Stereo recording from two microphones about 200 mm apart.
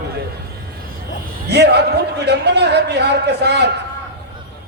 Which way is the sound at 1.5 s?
55° right (ahead or behind).